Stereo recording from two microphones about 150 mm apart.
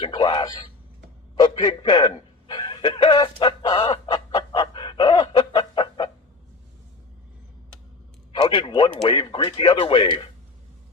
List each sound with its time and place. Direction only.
0.0 s speech: 30° left (ahead or behind)
1.4 s chuckle: 30° left (ahead or behind)
8.3 s a man's voice: 35° left (ahead or behind)